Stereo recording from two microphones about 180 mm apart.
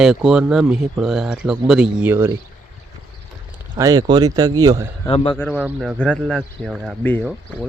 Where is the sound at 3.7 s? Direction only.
20° right (ahead or behind).